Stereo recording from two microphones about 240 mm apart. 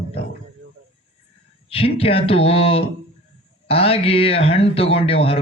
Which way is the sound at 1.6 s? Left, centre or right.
Left.